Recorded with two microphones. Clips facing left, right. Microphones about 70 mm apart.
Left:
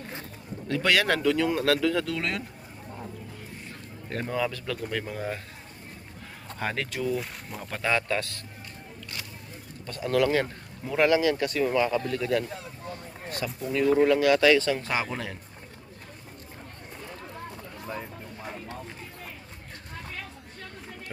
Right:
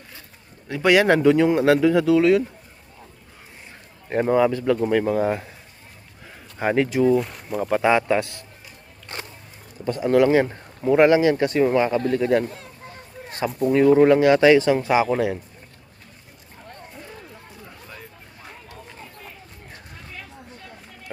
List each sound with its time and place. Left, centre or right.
0.7 s speech: centre
4.1 s speech: right
6.6 s speech: centre
7.2 s speech: centre
7.6 s speech: centre
9.1 s a sound: right
9.8 s speech: right